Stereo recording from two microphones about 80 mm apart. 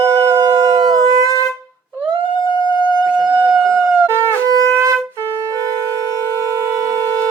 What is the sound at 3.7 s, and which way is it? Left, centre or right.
Shofar, right.